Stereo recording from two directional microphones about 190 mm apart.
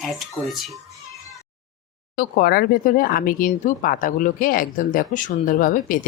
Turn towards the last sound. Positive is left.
turn(degrees=45)  # may be behind; listen again after turning